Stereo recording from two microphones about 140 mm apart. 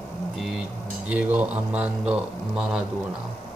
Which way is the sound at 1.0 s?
10° right (ahead or behind).